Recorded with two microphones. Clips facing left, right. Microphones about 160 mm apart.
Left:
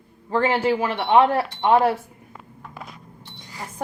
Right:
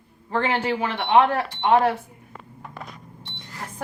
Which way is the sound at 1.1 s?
35° left (ahead or behind).